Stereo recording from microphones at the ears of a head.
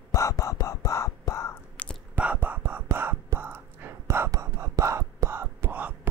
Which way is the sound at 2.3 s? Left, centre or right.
Right.